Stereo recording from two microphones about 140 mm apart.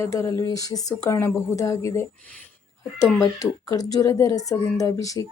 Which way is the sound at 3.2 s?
25° left (ahead or behind).